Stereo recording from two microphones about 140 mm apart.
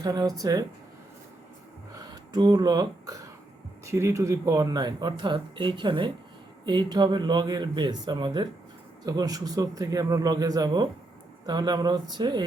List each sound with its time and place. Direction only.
0.0 s speech: 25° right (ahead or behind)
2.0 s a sound: 30° right (ahead or behind)
3.8 s speech: 20° right (ahead or behind)